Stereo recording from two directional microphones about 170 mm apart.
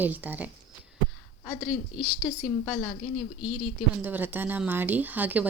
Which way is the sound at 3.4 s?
5° right (ahead or behind).